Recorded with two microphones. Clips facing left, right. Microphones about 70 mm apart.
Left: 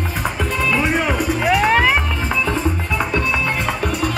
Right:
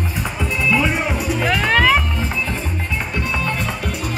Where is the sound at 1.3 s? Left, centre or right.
Centre.